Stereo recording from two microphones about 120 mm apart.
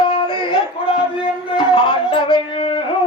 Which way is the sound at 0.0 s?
40° left (ahead or behind).